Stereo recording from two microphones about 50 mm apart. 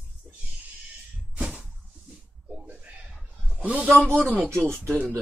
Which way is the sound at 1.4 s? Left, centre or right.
Right.